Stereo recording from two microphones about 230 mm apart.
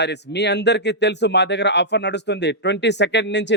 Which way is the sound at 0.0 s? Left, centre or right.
Left.